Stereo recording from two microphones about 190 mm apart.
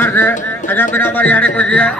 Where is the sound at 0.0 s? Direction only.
10° left (ahead or behind).